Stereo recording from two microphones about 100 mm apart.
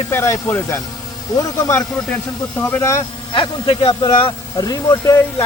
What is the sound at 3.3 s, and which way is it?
Speech, 55° left (ahead or behind).